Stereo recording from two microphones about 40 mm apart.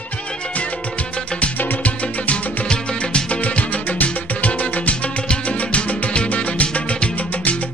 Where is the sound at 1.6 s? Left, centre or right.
Left.